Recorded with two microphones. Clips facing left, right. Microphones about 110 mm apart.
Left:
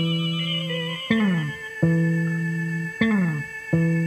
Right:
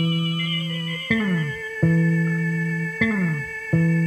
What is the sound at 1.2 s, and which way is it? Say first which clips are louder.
Music: left 1 dB; 35° left (ahead or behind).